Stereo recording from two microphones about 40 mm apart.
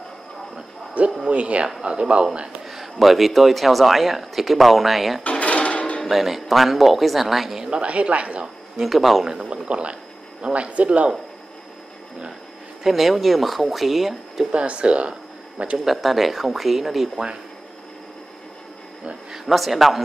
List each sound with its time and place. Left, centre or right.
1.2 s a woman's voice: right
2.6 s speech: centre
5.4 s music: left
6.0 s speech: centre
7.8 s a woman's voice: right
8.7 s speech: centre
9.5 s a woman's voice: right
12.8 s speech: centre
14.5 s speech: right
15.8 s speech: centre
19.3 s speech: centre